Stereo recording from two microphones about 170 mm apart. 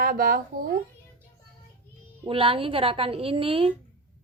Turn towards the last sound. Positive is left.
turn(degrees=-30)  # may be behind; listen again after turning